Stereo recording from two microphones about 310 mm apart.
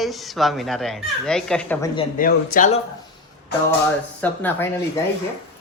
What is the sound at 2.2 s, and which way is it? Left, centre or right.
Speech, left.